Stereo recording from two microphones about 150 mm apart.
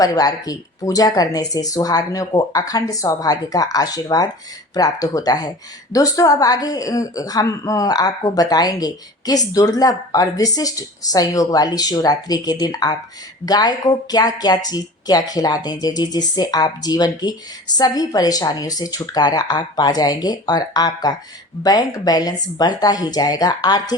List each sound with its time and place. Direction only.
0.0 s a woman's voice: 25° left (ahead or behind)